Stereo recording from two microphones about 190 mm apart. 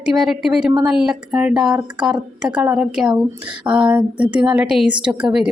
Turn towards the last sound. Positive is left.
turn(degrees=-5)  # may be behind; listen again after turning